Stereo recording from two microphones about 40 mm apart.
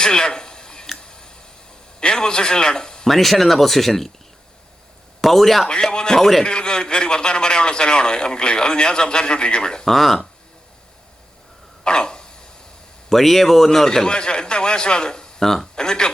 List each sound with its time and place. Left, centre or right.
0.0 s a sound: centre
2.0 s a man's voice: centre
3.1 s speech: centre
5.2 s speech: centre
5.9 s a man's voice: left
6.1 s speech: centre
6.4 s a man's voice: left
9.8 s speech: centre
11.8 s dog: centre
13.1 s speech: centre
13.7 s a man's voice: centre